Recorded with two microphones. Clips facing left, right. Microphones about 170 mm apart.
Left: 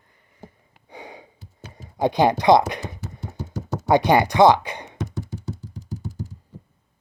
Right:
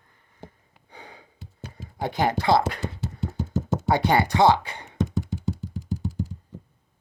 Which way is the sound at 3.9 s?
15° left (ahead or behind).